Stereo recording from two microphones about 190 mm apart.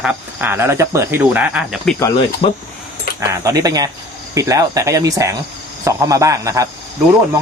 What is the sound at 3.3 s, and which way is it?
Speech, 15° right (ahead or behind).